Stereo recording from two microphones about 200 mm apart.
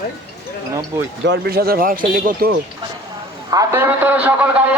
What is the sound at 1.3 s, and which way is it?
A man's voice, 50° right (ahead or behind).